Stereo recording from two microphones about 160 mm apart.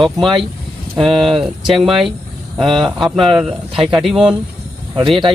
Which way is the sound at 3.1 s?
5° right (ahead or behind).